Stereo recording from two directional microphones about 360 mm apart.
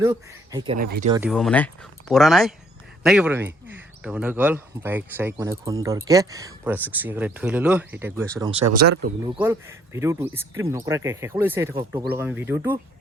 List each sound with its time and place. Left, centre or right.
0.0 s speech: centre
0.8 s speech: right
1.1 s speech: centre
8.7 s speech: right
9.3 s speech: centre